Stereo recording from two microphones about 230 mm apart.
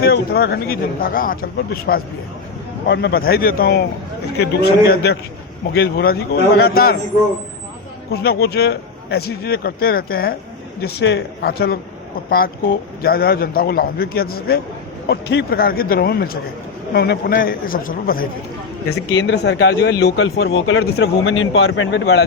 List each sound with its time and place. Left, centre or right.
0.0 s a man's voice: left
5.7 s speech: left
8.1 s a man's voice: left
19.1 s speech: left